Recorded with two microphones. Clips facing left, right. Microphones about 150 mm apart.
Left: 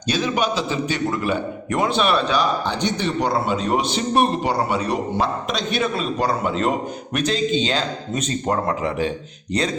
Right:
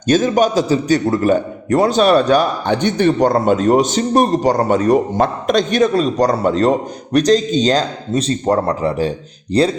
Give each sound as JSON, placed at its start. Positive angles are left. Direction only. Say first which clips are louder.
{"t": 0.1, "sound": "a man's voice", "louder": "right 8 dB", "side_deg": -45}